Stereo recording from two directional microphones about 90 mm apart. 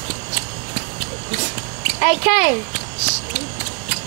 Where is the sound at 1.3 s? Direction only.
15° right (ahead or behind).